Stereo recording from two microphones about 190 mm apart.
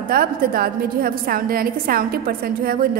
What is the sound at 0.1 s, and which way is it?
A woman's voice, 50° right (ahead or behind).